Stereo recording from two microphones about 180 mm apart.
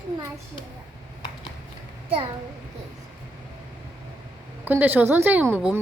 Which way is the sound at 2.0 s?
30° right (ahead or behind).